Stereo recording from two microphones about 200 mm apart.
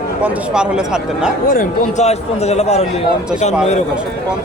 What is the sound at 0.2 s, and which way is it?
Speech, 5° right (ahead or behind).